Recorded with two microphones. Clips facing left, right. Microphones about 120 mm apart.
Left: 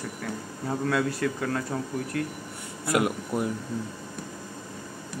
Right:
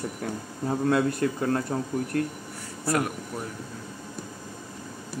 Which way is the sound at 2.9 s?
20° left (ahead or behind).